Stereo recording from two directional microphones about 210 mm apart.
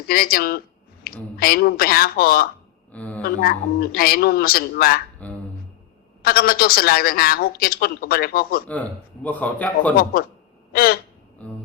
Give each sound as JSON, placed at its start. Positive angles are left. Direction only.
{"t": 0.1, "sound": "speech", "side_deg": 45}
{"t": 2.9, "sound": "a woman's voice", "side_deg": 5}
{"t": 3.2, "sound": "speech", "side_deg": 45}
{"t": 5.2, "sound": "a man's voice", "side_deg": 5}
{"t": 6.2, "sound": "speech", "side_deg": 45}
{"t": 8.6, "sound": "a man's voice", "side_deg": 5}
{"t": 10.7, "sound": "a sound", "side_deg": 45}
{"t": 11.4, "sound": "music", "side_deg": 5}